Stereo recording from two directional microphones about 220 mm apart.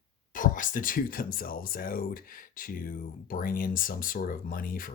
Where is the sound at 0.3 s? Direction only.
35° left (ahead or behind).